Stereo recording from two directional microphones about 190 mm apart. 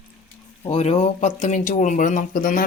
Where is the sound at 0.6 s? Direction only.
30° left (ahead or behind).